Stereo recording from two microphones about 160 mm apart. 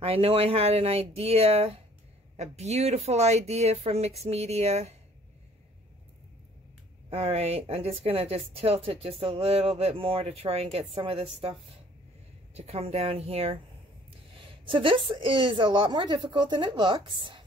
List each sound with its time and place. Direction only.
0.0 s speech: 35° right (ahead or behind)
7.1 s speech: 40° right (ahead or behind)
12.5 s a woman's voice: 40° right (ahead or behind)